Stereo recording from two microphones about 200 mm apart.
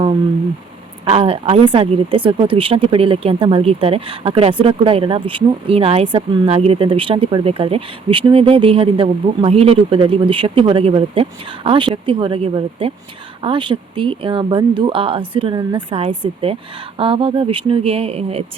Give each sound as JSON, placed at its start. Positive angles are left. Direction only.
{"t": 1.0, "sound": "speech", "side_deg": -30}